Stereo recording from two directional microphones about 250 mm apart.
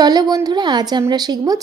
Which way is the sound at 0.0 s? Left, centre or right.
Centre.